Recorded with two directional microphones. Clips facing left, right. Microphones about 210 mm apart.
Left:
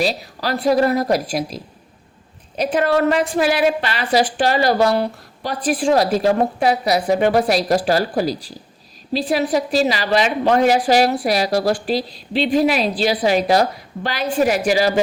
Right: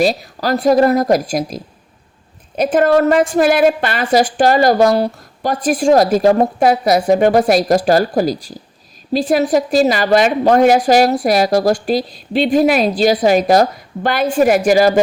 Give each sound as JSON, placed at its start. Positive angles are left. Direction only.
{"t": 0.0, "sound": "a woman's voice", "side_deg": -45}